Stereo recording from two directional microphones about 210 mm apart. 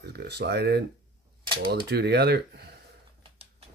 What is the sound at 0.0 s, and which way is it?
Speech, 55° right (ahead or behind).